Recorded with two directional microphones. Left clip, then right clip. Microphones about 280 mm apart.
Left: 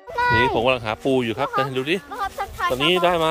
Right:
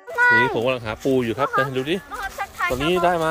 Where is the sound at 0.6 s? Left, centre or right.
Centre.